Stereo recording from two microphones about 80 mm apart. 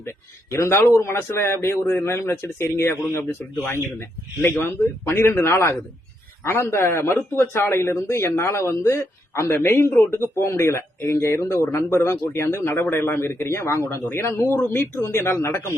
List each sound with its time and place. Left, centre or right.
0.5 s speech: left
4.6 s speech: left